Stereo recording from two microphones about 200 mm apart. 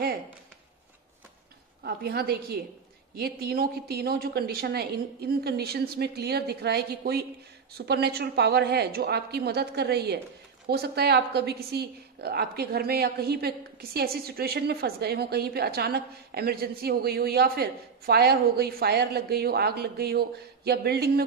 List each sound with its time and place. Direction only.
1.8 s a woman's voice: 55° right (ahead or behind)